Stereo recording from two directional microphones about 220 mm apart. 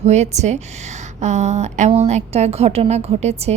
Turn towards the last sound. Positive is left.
turn(degrees=-30)  # may be behind; listen again after turning